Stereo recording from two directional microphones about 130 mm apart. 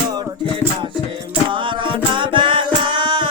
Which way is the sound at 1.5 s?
40° right (ahead or behind).